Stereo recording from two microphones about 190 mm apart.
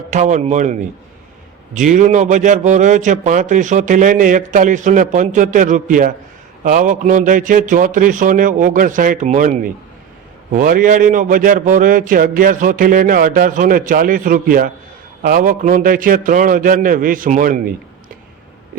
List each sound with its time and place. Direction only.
0.1 s a man's voice: 40° right (ahead or behind)